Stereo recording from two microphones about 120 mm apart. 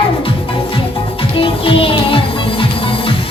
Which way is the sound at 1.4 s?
50° left (ahead or behind).